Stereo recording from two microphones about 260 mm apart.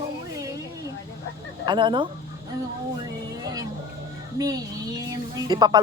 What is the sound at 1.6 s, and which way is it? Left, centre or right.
Speech, centre.